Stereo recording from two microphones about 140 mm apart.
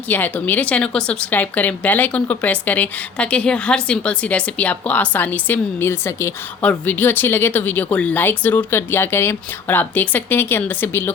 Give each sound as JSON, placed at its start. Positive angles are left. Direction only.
{"t": 0.1, "sound": "a woman's voice", "side_deg": 10}